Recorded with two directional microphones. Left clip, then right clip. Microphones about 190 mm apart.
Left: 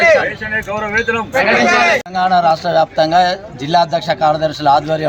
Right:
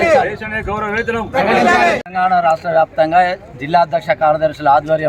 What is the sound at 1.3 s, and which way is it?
Speech, 60° right (ahead or behind).